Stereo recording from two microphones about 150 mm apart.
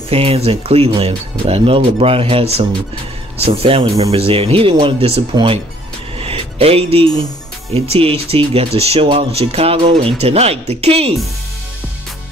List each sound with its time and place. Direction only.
0.1 s speech: 40° right (ahead or behind)
6.1 s music: 40° right (ahead or behind)
7.9 s speech: 40° right (ahead or behind)